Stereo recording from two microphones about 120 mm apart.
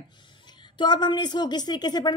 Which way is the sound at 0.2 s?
40° left (ahead or behind).